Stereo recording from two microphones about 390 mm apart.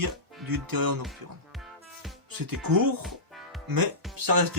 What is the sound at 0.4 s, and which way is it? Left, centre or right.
Speech, right.